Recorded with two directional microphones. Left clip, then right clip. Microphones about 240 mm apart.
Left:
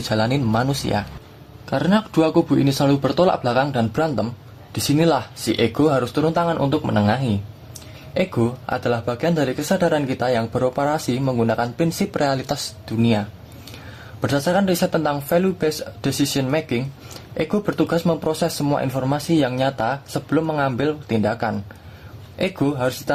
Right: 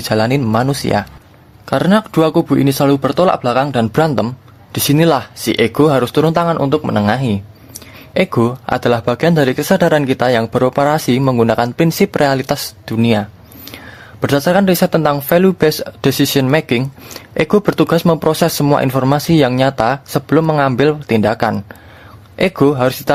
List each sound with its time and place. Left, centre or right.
0.0 s speech: right